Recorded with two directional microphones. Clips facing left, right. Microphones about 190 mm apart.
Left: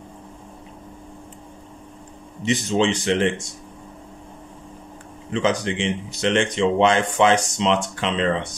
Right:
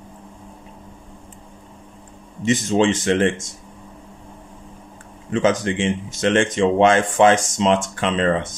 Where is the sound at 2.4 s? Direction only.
45° right (ahead or behind).